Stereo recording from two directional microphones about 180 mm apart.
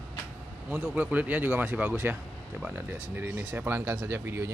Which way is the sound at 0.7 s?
10° right (ahead or behind).